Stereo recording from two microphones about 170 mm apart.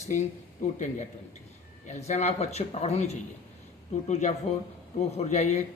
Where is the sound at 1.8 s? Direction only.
45° left (ahead or behind).